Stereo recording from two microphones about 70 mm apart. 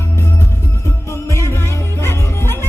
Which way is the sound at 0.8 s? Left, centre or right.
Left.